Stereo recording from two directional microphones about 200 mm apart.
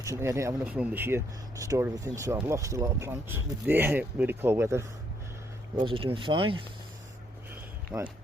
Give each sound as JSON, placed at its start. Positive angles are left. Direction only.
{"t": 0.0, "sound": "speech", "side_deg": -15}
{"t": 5.8, "sound": "speech", "side_deg": -25}
{"t": 7.9, "sound": "speech", "side_deg": 0}